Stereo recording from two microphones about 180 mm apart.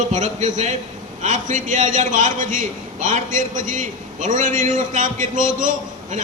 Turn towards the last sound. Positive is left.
turn(degrees=-45)  # may be behind; listen again after turning